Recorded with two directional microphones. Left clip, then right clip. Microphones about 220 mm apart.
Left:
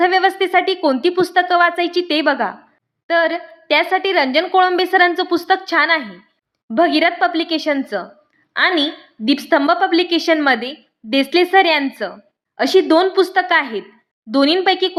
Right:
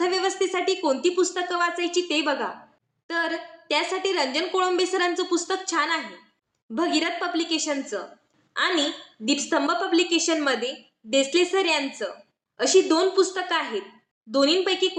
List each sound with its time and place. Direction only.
0.0 s a woman's voice: 45° left (ahead or behind)